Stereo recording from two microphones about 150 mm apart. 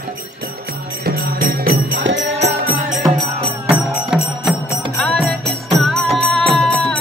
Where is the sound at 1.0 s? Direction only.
85° right.